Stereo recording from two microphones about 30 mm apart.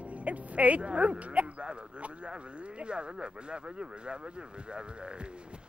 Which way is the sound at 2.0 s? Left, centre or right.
Right.